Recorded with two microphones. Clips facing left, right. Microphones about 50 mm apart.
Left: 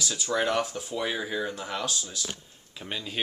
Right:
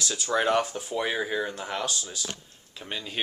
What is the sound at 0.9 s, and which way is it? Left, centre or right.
Speech, centre.